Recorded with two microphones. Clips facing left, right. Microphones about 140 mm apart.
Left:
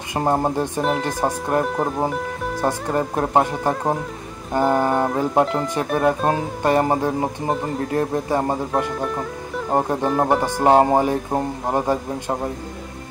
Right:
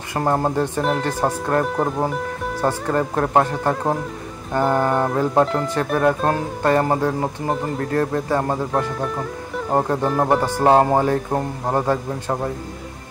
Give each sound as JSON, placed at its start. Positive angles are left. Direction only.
{"t": 0.1, "sound": "speech", "side_deg": 15}
{"t": 1.6, "sound": "speech", "side_deg": 0}
{"t": 2.6, "sound": "speech", "side_deg": 15}
{"t": 6.2, "sound": "speech", "side_deg": 15}
{"t": 8.9, "sound": "music", "side_deg": 0}
{"t": 10.0, "sound": "speech", "side_deg": 0}